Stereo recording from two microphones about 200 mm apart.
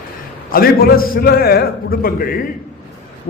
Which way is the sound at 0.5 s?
50° left (ahead or behind).